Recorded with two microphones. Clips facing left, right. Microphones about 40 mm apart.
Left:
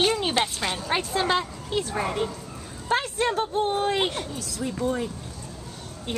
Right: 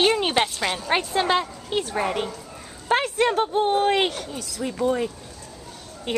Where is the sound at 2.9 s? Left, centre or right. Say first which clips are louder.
Right 4 dB; right.